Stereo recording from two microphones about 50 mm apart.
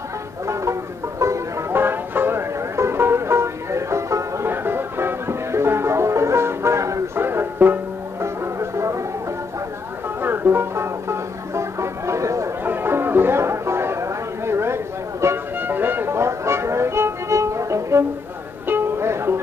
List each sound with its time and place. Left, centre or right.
1.2 s music: right
1.7 s music: right
4.5 s music: right
7.2 s music: right
8.2 s music: right
10.2 s music: right
12.6 s music: right
15.6 s music: right
16.2 s music: right
18.7 s music: right